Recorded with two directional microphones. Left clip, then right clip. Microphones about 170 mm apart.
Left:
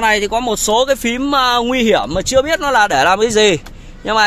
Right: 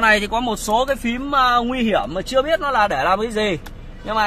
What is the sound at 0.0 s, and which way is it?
Speech, 25° left (ahead or behind).